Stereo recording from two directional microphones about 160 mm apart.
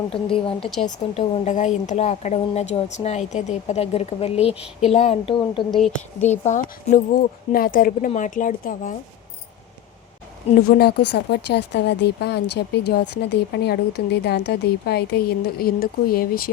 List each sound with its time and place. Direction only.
0.1 s a woman's voice: 35° left (ahead or behind)
0.6 s a woman's voice: centre (ahead or behind)
0.9 s a woman's voice: 50° left (ahead or behind); by 5.6 s 35° left (ahead or behind)
5.7 s a woman's voice: centre (ahead or behind)
6.2 s speech: 45° left (ahead or behind)
10.7 s speech: 80° left